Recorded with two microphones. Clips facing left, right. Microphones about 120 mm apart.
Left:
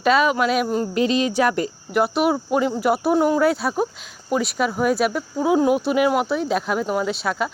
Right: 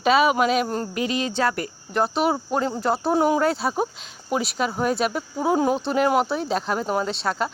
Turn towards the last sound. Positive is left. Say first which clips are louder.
# left 2 dB
turn(degrees=5)  # may be behind; listen again after turning